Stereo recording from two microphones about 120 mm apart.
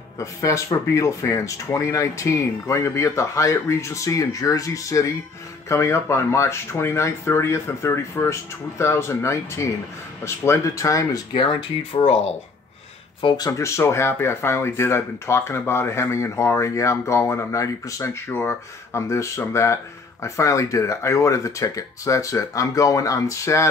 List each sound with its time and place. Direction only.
0.2 s speech: 25° left (ahead or behind)
11.3 s speech: 45° left (ahead or behind)
13.5 s speech: 25° left (ahead or behind)